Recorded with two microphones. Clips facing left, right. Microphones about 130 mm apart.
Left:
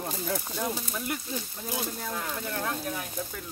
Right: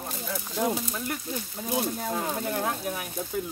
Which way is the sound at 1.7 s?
25° right (ahead or behind).